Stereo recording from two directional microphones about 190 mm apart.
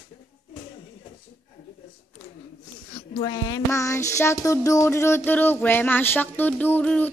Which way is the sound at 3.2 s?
20° left (ahead or behind).